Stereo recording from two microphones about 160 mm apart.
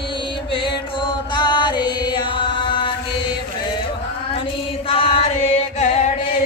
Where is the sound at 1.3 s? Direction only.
30° left (ahead or behind).